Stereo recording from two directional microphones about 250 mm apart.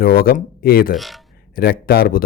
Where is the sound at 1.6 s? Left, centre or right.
Left.